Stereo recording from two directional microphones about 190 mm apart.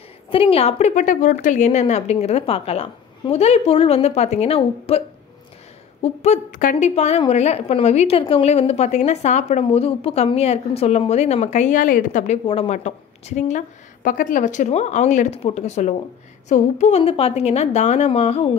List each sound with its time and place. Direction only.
0.3 s a woman's voice: 30° left (ahead or behind)
6.0 s a woman's voice: 35° left (ahead or behind)